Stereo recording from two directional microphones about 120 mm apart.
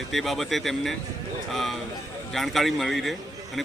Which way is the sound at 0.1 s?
Centre (ahead or behind).